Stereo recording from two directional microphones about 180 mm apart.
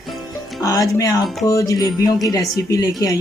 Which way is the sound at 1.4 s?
20° left (ahead or behind).